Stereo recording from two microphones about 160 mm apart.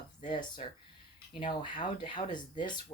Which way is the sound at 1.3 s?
30° left (ahead or behind).